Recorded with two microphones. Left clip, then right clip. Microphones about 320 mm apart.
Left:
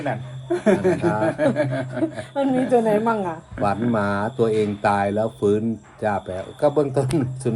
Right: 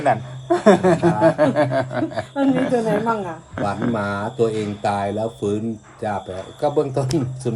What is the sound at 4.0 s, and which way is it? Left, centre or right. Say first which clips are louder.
Speech: even; centre.